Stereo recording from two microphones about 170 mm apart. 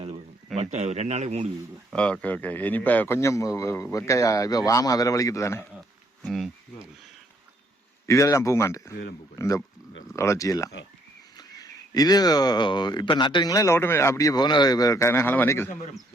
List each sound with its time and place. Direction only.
0.5 s speech: 40° right (ahead or behind)
1.9 s a man's voice: 5° left (ahead or behind)
6.2 s insect: centre (ahead or behind)
8.0 s a man's voice: 20° left (ahead or behind)